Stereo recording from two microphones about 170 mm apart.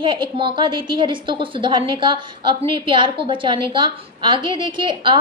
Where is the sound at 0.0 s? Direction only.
30° right (ahead or behind).